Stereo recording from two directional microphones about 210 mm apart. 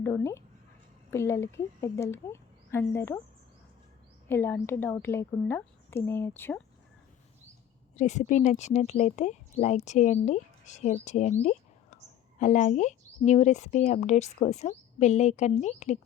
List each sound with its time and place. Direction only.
0.0 s a woman's voice: 15° left (ahead or behind)
4.3 s a woman's voice: 10° left (ahead or behind)
7.9 s speech: 35° left (ahead or behind)